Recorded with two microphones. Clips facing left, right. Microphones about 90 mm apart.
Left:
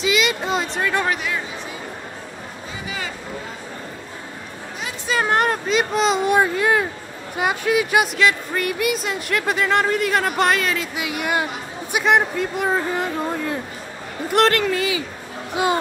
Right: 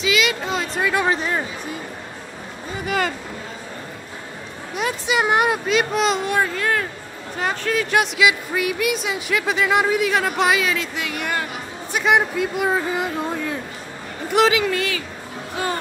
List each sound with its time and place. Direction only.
0.3 s speech: 5° left (ahead or behind)
0.7 s speech: 5° right (ahead or behind)
1.1 s speech: 35° right (ahead or behind)
5.0 s speech: 15° right (ahead or behind)
6.2 s speech: 15° left (ahead or behind)
8.2 s speech: 5° right (ahead or behind)
15.5 s speech: 15° left (ahead or behind)